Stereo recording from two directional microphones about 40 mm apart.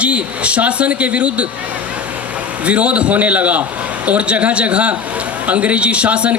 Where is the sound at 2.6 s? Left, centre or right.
Right.